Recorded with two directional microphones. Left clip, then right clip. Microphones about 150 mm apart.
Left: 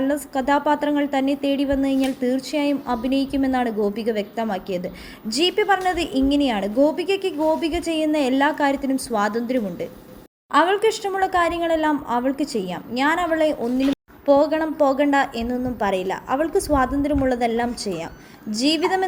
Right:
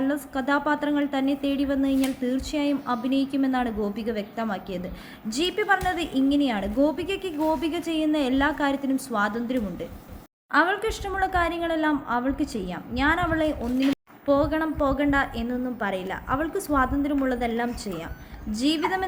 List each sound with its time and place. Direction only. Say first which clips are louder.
0.0 s a woman's voice: left 5 dB; 15° left (ahead or behind)